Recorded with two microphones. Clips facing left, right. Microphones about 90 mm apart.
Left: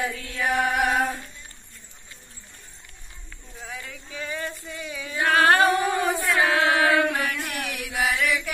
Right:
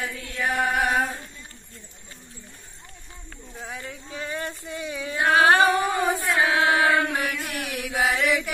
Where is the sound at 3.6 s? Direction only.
30° right (ahead or behind).